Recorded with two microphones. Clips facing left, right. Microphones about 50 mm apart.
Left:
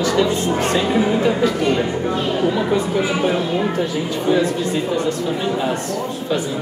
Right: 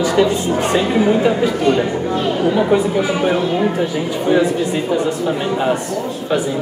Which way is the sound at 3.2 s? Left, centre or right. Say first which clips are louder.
Right 3 dB; right.